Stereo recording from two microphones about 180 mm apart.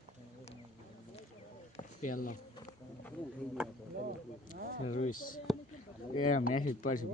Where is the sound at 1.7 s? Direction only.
45° left (ahead or behind).